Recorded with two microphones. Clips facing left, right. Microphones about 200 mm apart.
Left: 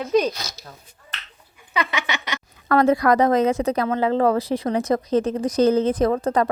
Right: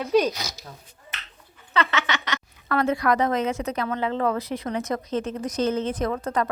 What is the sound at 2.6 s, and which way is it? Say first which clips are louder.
Speech: left 5 dB; 40° left (ahead or behind).